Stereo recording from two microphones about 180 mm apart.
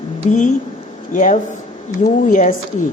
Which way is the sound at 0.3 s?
45° left (ahead or behind).